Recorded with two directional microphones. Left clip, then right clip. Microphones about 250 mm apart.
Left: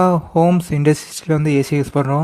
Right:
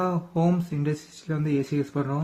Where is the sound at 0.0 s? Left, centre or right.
Left.